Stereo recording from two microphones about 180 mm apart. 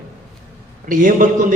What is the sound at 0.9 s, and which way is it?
Speech, 45° right (ahead or behind).